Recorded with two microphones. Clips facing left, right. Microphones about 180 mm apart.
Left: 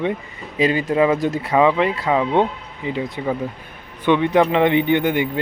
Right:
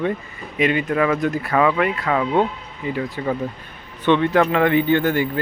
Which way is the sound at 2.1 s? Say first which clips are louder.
Left 2 dB; 15° left (ahead or behind).